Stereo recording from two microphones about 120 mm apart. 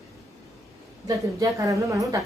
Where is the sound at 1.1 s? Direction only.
30° right (ahead or behind).